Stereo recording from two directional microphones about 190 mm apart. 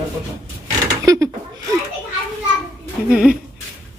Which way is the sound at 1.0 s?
15° right (ahead or behind).